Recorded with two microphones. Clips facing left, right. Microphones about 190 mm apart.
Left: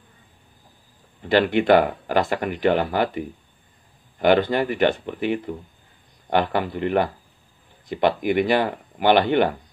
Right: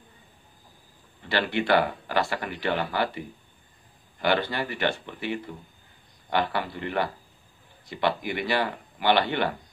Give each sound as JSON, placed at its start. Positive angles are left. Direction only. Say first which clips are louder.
{"t": 1.3, "sound": "speech", "louder": "left 7 dB", "side_deg": 50}